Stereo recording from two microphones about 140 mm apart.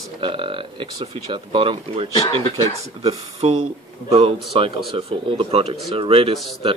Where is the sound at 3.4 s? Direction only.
45° right (ahead or behind).